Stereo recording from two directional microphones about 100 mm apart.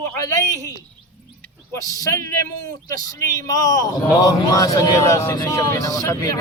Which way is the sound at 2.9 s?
35° left (ahead or behind).